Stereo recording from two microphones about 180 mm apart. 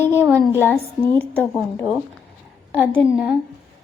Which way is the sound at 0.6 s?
10° left (ahead or behind).